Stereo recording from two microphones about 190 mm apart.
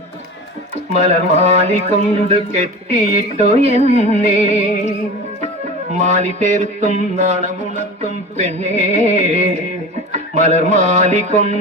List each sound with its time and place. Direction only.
0.9 s mantra: 35° right (ahead or behind)
6.0 s mantra: 40° right (ahead or behind)